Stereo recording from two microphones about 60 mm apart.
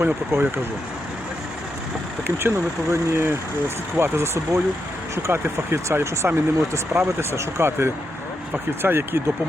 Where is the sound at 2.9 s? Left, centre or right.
Right.